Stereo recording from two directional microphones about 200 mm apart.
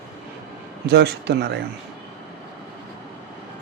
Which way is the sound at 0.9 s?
55° right (ahead or behind).